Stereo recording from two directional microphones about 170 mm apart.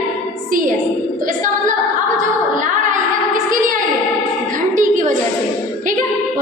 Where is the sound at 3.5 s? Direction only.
50° right (ahead or behind).